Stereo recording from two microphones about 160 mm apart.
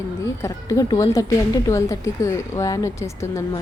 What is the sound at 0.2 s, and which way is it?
Speech, 20° left (ahead or behind).